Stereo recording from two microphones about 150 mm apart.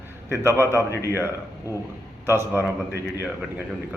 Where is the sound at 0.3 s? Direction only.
15° right (ahead or behind).